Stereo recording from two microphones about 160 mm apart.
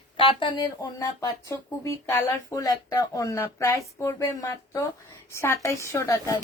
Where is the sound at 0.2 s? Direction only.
30° left (ahead or behind).